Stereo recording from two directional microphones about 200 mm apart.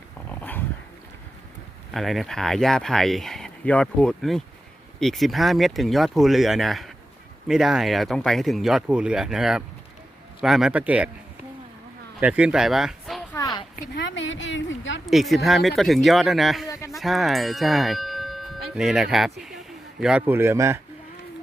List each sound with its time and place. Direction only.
0.3 s dog: 10° left (ahead or behind)
1.9 s speech: centre (ahead or behind)
12.2 s speech: 5° right (ahead or behind)
13.3 s a sound: 20° left (ahead or behind)
13.7 s speech: 60° left (ahead or behind)
15.0 s speech: centre (ahead or behind)
16.9 s a sound: centre (ahead or behind)
18.7 s a man's voice: 5° right (ahead or behind)